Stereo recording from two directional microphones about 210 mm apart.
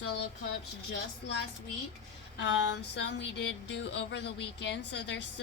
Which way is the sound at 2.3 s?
60° left (ahead or behind).